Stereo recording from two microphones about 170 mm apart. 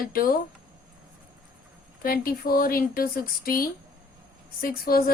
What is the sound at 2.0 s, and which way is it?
Speech, 60° left (ahead or behind).